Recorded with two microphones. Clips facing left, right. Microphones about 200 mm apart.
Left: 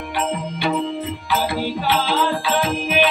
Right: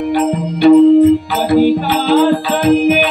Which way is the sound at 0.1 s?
40° right (ahead or behind).